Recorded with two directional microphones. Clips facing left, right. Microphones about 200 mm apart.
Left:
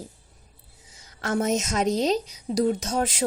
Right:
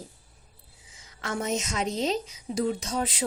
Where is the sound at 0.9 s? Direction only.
40° left (ahead or behind).